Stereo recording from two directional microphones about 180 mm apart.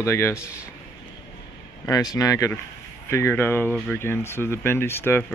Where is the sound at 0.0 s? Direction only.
15° left (ahead or behind).